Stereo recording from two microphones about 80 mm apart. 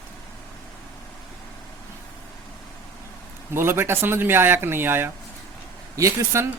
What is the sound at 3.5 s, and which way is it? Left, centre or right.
Speech, right.